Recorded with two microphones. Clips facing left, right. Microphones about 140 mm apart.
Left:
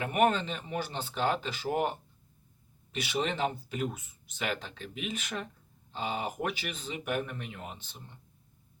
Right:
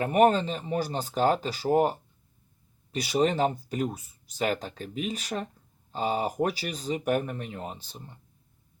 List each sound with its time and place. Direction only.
0.0 s speech: 35° right (ahead or behind)